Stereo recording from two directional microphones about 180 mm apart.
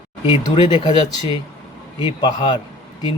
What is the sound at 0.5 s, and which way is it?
Speech, 25° left (ahead or behind).